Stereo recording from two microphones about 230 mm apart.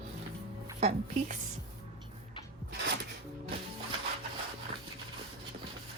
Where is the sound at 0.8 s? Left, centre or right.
Right.